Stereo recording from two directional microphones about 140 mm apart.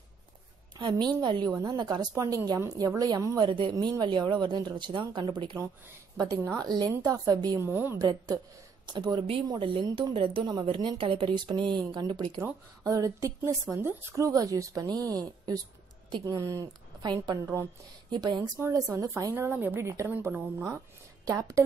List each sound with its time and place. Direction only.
0.7 s speech: 35° right (ahead or behind)
3.3 s a woman's voice: 35° right (ahead or behind)
7.6 s a woman's voice: 15° right (ahead or behind)
8.0 s a woman's voice: 30° right (ahead or behind)
12.4 s a woman's voice: 20° right (ahead or behind)